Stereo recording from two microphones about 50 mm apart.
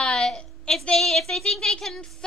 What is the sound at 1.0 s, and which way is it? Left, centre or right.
A woman's voice, centre.